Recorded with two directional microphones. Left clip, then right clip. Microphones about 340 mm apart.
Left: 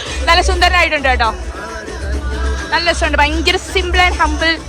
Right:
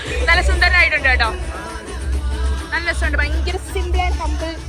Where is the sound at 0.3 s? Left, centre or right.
Centre.